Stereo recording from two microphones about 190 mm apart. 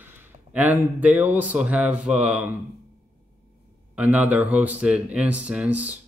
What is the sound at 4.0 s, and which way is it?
Speech, 10° right (ahead or behind).